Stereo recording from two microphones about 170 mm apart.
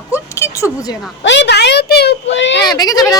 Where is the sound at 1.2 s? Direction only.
90° left.